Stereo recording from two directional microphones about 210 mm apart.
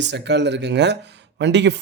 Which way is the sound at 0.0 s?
55° right (ahead or behind).